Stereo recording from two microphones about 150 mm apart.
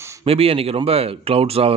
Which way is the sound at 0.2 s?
40° right (ahead or behind).